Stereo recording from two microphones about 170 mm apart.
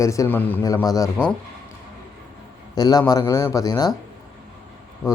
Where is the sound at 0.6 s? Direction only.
20° left (ahead or behind).